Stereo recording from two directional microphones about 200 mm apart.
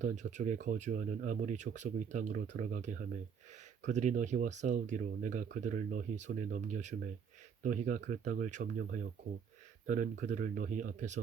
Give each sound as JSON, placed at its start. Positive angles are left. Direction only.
{"t": 0.0, "sound": "speech", "side_deg": -35}